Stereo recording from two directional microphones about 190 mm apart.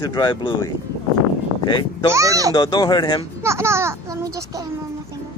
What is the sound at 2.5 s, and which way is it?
Speech, 20° left (ahead or behind).